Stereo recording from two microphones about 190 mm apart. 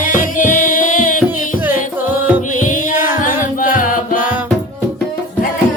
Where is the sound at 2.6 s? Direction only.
40° left (ahead or behind).